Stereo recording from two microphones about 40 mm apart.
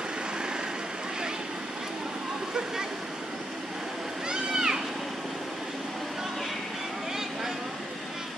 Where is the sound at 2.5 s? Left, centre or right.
Centre.